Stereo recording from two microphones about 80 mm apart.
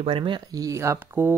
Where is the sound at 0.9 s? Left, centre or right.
Right.